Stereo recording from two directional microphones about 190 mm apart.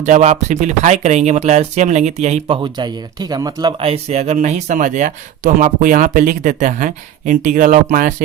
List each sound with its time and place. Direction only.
0.0 s speech: 40° right (ahead or behind)